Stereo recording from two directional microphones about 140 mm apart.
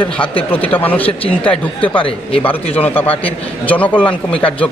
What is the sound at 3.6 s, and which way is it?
Speech, 10° left (ahead or behind).